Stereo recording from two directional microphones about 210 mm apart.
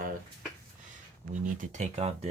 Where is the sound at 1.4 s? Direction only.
35° right (ahead or behind).